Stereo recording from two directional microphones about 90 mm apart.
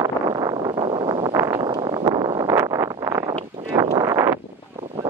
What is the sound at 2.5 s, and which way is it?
Vehicle, 35° right (ahead or behind).